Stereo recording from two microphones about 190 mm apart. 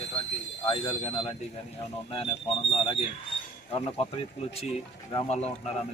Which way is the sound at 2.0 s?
30° left (ahead or behind).